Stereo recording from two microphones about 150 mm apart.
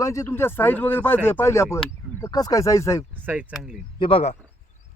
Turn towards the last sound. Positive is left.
turn(degrees=40)  # may be behind; listen again after turning